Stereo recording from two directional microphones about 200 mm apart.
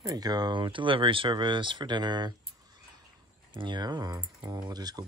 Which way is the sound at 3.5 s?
25° right (ahead or behind).